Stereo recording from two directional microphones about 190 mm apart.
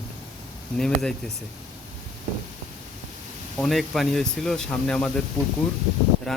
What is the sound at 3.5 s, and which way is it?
Speech, centre (ahead or behind).